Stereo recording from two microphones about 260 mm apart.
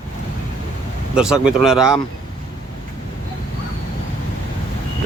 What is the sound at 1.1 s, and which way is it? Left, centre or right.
Speech, centre.